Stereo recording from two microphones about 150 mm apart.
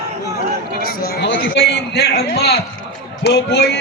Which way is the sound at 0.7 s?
85° left.